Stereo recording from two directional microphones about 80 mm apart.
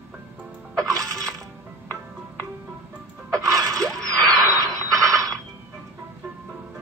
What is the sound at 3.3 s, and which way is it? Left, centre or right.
Music, right.